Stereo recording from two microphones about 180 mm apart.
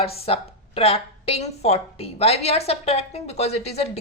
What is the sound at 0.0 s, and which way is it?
A woman's voice, 35° left (ahead or behind).